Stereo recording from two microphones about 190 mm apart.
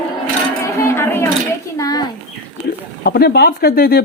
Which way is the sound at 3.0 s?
60° left (ahead or behind).